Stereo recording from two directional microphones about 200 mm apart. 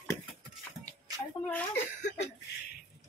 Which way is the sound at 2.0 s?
35° left (ahead or behind).